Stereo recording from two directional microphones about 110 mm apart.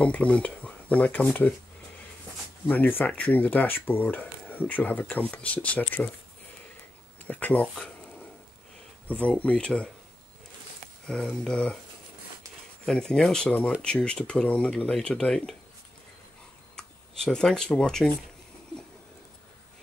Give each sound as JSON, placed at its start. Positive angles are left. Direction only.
{"t": 0.0, "sound": "speech", "side_deg": 10}
{"t": 2.7, "sound": "speech", "side_deg": 15}
{"t": 7.2, "sound": "speech", "side_deg": 15}
{"t": 7.7, "sound": "a sound", "side_deg": 5}
{"t": 9.0, "sound": "speech", "side_deg": 10}
{"t": 11.1, "sound": "speech", "side_deg": 5}
{"t": 12.8, "sound": "speech", "side_deg": 5}
{"t": 16.7, "sound": "speech", "side_deg": 5}